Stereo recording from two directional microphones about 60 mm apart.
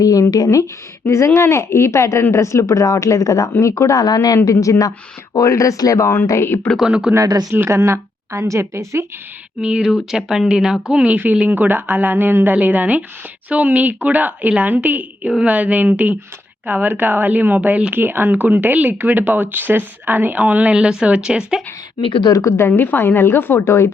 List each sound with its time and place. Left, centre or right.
0.0 s speech: left
1.0 s speech: left
3.6 s speech: left
4.4 s speech: left
6.7 s speech: centre
7.7 s speech: right
9.6 s speech: centre
17.9 s speech: right
21.0 s speech: centre
22.2 s speech: left